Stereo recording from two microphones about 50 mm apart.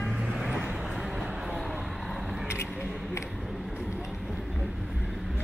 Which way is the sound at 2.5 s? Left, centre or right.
Left.